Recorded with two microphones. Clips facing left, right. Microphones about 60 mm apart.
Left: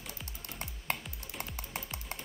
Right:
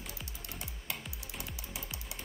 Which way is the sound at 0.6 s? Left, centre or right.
Left.